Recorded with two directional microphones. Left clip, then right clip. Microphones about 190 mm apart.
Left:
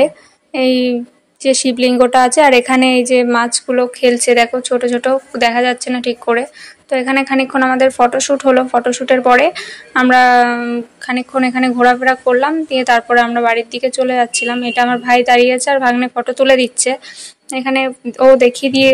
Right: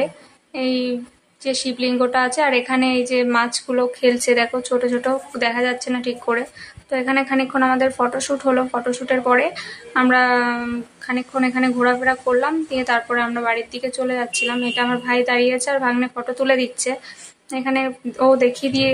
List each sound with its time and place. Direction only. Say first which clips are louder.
0.0 s a woman's voice: left 10 dB; 40° left (ahead or behind)